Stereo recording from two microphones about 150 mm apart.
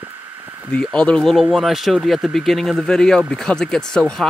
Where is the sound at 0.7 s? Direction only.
5° left (ahead or behind).